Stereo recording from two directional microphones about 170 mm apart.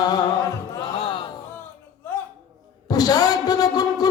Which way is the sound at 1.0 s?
30° left (ahead or behind).